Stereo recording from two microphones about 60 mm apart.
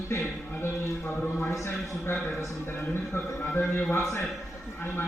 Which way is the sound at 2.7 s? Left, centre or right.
Left.